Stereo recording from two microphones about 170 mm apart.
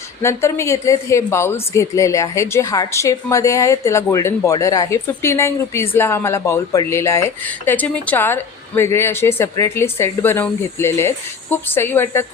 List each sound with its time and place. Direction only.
0.2 s a woman's voice: 15° left (ahead or behind)